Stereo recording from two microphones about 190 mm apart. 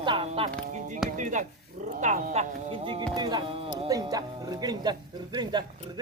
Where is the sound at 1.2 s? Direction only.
40° right (ahead or behind); by 5.6 s 25° right (ahead or behind).